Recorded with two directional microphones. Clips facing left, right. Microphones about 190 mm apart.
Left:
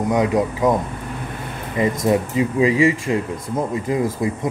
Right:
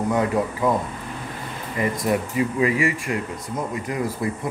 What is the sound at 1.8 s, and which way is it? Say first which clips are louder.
Speech: left 4 dB; 20° left (ahead or behind).